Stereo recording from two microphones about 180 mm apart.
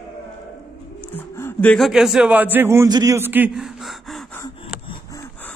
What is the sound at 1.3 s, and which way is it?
A man's voice, 10° left (ahead or behind).